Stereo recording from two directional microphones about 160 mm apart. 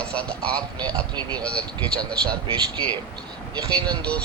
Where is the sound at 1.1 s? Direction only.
25° right (ahead or behind).